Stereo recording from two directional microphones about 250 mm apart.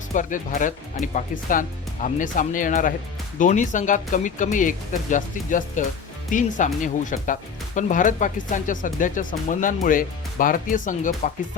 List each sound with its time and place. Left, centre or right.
0.1 s speech: left